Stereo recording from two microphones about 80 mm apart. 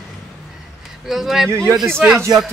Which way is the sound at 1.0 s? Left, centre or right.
Centre.